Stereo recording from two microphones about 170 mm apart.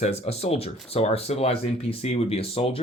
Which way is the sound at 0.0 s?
40° left (ahead or behind).